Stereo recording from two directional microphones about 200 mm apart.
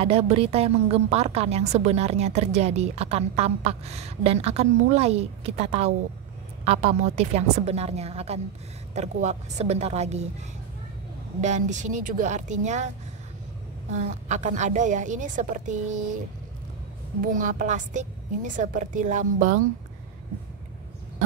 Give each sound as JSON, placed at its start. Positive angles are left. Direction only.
{"t": 0.0, "sound": "a woman's voice", "side_deg": -30}
{"t": 11.4, "sound": "a woman's voice", "side_deg": -35}
{"t": 17.2, "sound": "a woman's voice", "side_deg": -40}